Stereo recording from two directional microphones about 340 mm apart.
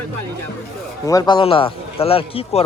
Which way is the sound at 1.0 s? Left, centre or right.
Centre.